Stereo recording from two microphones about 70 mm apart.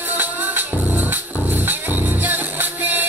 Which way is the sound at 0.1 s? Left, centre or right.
Right.